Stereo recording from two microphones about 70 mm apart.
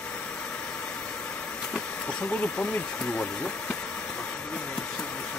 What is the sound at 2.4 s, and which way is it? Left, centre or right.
Speech, centre.